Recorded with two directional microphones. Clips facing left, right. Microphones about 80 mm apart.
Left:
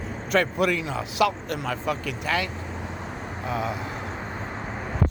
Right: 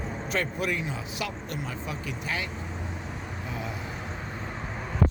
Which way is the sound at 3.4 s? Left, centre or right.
Left.